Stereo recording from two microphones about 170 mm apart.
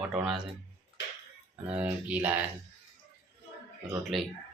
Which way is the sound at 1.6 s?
10° right (ahead or behind).